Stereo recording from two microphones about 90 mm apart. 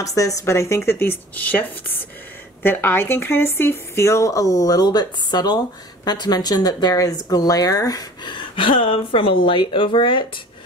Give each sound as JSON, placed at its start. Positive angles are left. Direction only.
{"t": 0.0, "sound": "a woman's voice", "side_deg": 40}
{"t": 8.3, "sound": "speech", "side_deg": 70}